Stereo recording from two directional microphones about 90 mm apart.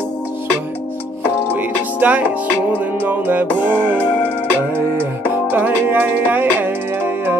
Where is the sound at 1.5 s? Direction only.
20° right (ahead or behind).